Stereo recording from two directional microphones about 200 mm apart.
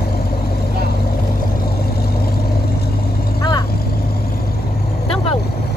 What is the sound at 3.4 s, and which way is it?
Vehicle, 20° left (ahead or behind).